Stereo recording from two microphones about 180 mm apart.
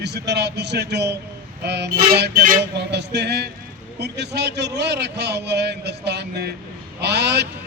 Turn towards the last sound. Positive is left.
turn(degrees=-65)  # may be behind; listen again after turning